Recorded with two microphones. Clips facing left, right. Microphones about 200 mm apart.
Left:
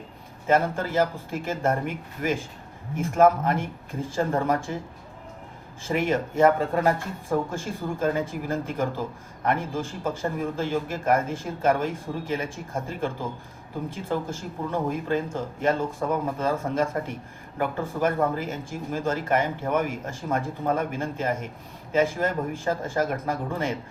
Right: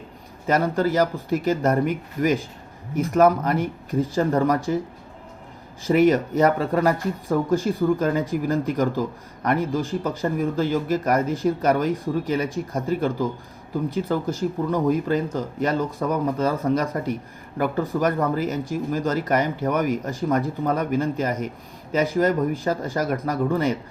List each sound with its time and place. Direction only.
0.5 s a man's voice: 40° right (ahead or behind)
5.8 s a man's voice: 40° right (ahead or behind)